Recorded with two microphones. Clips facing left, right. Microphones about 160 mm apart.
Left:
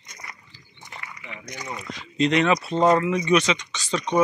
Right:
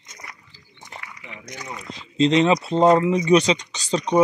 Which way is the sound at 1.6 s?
5° left (ahead or behind).